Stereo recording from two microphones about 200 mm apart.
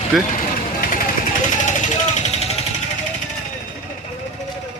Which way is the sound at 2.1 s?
35° left (ahead or behind).